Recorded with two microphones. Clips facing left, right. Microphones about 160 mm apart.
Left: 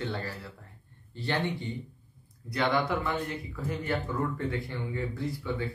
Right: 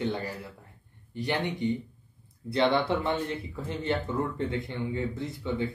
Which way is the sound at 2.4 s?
30° right (ahead or behind).